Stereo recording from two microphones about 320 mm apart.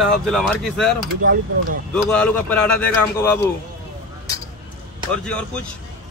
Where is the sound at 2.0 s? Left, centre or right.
Centre.